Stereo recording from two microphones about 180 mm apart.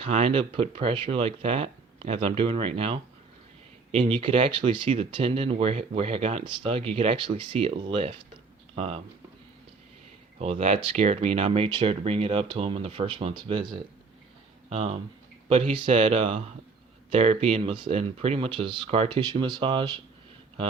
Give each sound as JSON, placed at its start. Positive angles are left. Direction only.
{"t": 0.0, "sound": "speech", "side_deg": -35}
{"t": 10.3, "sound": "speech", "side_deg": -40}
{"t": 14.7, "sound": "speech", "side_deg": -35}